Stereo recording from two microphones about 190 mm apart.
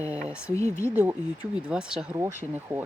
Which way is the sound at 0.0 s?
5° right (ahead or behind).